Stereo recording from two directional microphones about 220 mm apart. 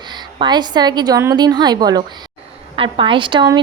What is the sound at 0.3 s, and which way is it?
A woman's voice, 20° right (ahead or behind).